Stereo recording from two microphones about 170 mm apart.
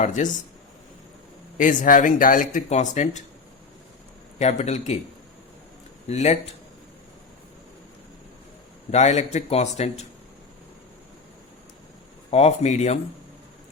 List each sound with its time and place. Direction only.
0.0 s speech: 45° left (ahead or behind)
1.5 s speech: 50° left (ahead or behind)
4.4 s a man's voice: 40° left (ahead or behind)
6.1 s a man's voice: 40° left (ahead or behind)
8.9 s a man's voice: 40° left (ahead or behind)
12.3 s a man's voice: 40° left (ahead or behind)